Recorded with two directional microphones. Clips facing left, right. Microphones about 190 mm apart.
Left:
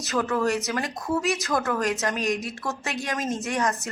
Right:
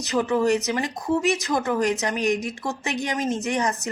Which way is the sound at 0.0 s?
15° right (ahead or behind).